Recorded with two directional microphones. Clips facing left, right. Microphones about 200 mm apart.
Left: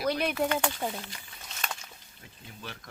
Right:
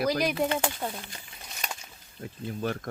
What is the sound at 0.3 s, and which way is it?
Speech, 25° right (ahead or behind).